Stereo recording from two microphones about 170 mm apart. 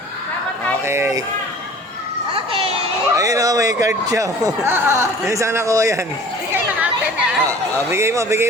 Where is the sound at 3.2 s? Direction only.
20° right (ahead or behind).